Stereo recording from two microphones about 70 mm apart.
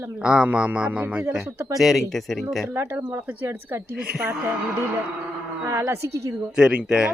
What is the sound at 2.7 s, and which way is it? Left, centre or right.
Speech, right.